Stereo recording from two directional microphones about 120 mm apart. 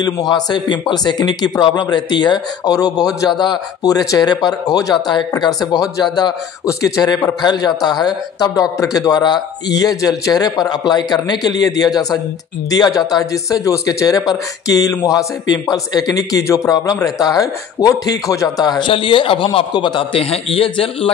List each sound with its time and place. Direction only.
0.0 s speech: 35° left (ahead or behind); by 21.1 s 50° left (ahead or behind)